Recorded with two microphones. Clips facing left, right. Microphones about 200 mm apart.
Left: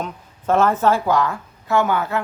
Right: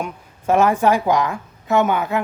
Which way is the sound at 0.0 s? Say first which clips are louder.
Right 1 dB; 10° right (ahead or behind).